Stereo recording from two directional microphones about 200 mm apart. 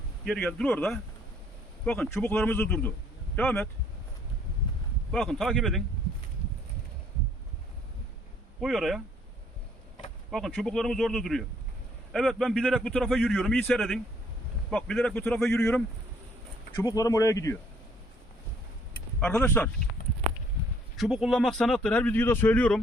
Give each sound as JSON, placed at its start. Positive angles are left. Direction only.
{"t": 0.3, "sound": "a man's voice", "side_deg": 5}
{"t": 5.1, "sound": "a man's voice", "side_deg": 0}
{"t": 8.6, "sound": "a man's voice", "side_deg": 0}
{"t": 10.3, "sound": "a man's voice", "side_deg": 0}
{"t": 16.7, "sound": "a man's voice", "side_deg": 20}
{"t": 19.2, "sound": "a man's voice", "side_deg": 5}
{"t": 20.9, "sound": "a man's voice", "side_deg": 0}